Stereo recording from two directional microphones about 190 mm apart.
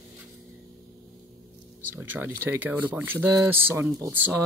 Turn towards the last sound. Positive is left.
turn(degrees=-10)  # may be behind; listen again after turning